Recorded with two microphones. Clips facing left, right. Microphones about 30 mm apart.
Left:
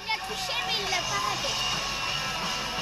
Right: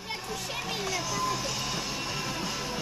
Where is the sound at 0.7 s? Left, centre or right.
Left.